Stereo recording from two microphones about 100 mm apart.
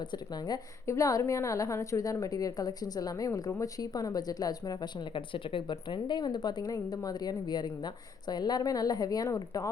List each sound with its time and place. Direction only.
0.1 s a woman's voice: 45° left (ahead or behind)